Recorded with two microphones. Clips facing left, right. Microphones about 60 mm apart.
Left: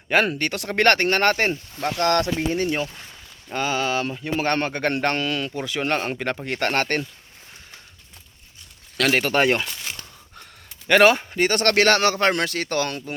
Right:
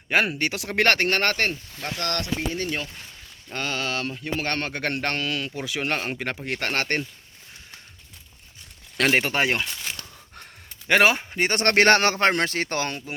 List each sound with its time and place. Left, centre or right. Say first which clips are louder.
0.1 s speech: left 2 dB; centre
1.3 s speech: left 4 dB; centre
2.6 s speech: left 5 dB; centre
9.0 s speech: left 3 dB; centre
11.4 s speech: even; right